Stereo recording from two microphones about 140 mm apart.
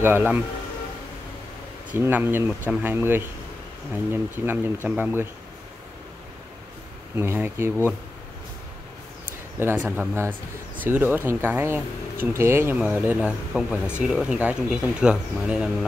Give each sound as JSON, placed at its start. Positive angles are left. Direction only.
{"t": 0.0, "sound": "speech", "side_deg": -15}
{"t": 1.9, "sound": "speech", "side_deg": -15}
{"t": 7.2, "sound": "speech", "side_deg": -15}
{"t": 9.6, "sound": "speech", "side_deg": -15}